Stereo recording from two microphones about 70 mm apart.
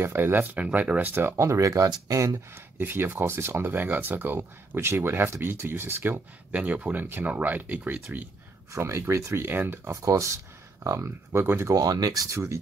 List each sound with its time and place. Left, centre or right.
0.0 s speech: right
1.3 s speech: right
2.8 s speech: right
4.4 s speech: right
6.5 s speech: right
8.7 s speech: right
9.8 s speech: right
11.1 s speech: right
11.7 s speech: right